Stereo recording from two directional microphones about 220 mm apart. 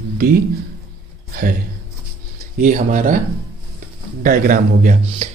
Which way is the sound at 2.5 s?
35° right (ahead or behind).